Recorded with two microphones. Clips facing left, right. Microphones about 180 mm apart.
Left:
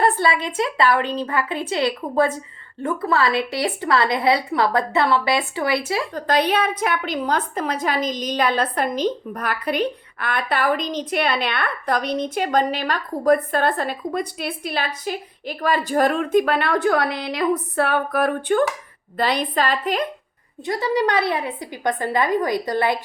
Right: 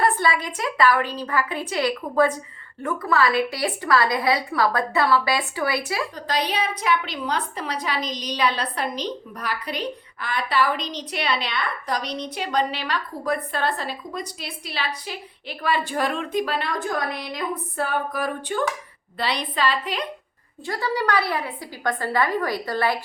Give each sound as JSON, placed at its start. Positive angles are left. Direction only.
{"t": 0.0, "sound": "a woman's voice", "side_deg": 25}
{"t": 6.1, "sound": "a woman's voice", "side_deg": 55}
{"t": 19.1, "sound": "a woman's voice", "side_deg": 45}
{"t": 20.7, "sound": "a woman's voice", "side_deg": 20}